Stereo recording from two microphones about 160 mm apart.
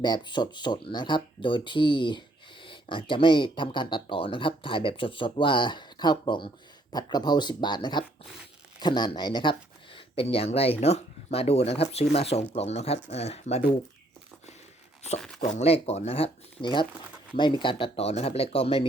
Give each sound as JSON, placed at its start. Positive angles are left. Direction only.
{"t": 0.0, "sound": "speech", "side_deg": 25}
{"t": 15.4, "sound": "speech", "side_deg": 45}